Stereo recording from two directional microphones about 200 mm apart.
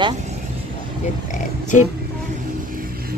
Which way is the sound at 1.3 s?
40° left (ahead or behind).